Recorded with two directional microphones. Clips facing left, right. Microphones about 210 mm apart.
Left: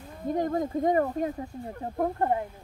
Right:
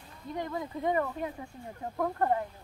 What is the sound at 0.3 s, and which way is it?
Speech, 45° left (ahead or behind).